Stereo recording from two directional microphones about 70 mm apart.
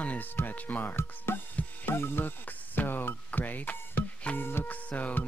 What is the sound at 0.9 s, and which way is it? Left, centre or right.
Speech, left.